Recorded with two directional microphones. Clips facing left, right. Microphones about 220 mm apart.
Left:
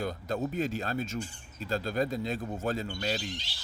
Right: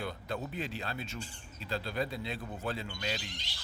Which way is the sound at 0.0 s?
40° left (ahead or behind).